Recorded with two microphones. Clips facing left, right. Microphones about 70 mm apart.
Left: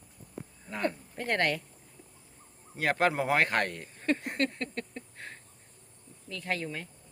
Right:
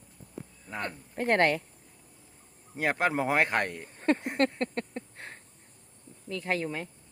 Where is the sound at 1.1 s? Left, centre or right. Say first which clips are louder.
Right 8 dB; right.